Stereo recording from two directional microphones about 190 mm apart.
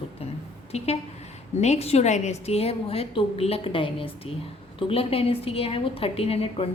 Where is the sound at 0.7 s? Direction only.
35° left (ahead or behind).